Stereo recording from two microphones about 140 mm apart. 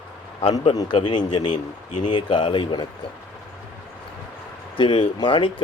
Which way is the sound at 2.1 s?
35° left (ahead or behind).